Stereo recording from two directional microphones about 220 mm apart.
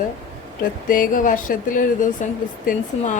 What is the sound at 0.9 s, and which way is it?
Speech, 40° left (ahead or behind).